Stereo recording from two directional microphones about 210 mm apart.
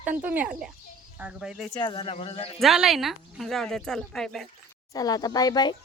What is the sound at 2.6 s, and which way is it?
A woman's voice, centre (ahead or behind).